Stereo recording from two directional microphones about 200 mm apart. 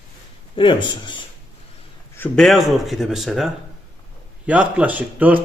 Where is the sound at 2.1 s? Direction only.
5° left (ahead or behind).